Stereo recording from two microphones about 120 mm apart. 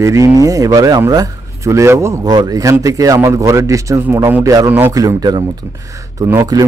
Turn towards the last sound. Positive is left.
turn(degrees=-30)  # may be behind; listen again after turning